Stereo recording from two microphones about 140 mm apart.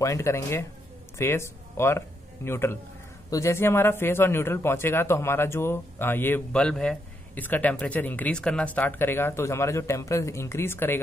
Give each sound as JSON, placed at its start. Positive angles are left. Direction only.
{"t": 0.0, "sound": "a man's voice", "side_deg": 20}